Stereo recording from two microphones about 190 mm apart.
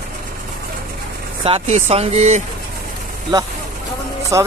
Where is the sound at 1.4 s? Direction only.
30° right (ahead or behind).